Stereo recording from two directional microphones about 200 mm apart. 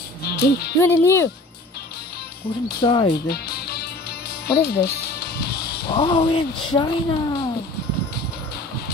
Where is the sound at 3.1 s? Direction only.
50° left (ahead or behind).